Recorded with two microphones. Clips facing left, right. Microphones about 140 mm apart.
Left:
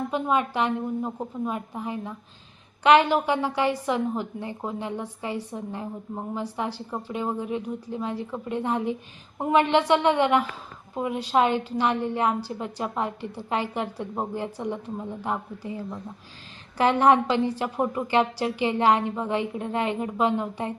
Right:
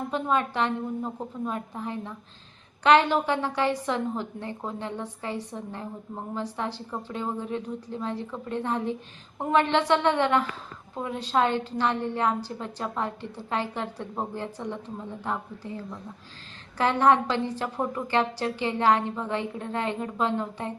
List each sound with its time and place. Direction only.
0.1 s a woman's voice: 10° left (ahead or behind)